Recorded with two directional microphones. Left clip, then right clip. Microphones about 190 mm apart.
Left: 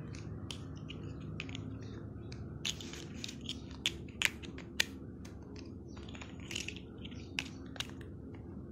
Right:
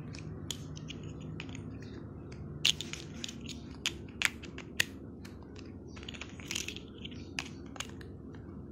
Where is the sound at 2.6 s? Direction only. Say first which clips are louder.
Right 10 dB; 40° right (ahead or behind).